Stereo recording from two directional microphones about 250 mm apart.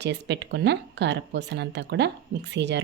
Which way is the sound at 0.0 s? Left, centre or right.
Right.